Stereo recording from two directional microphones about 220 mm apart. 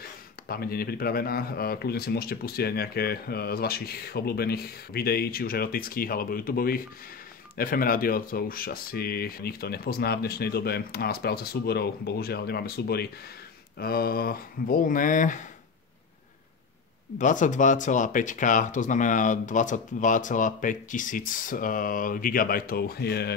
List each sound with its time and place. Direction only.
0.5 s speech: 45° left (ahead or behind)
17.2 s speech: 35° left (ahead or behind)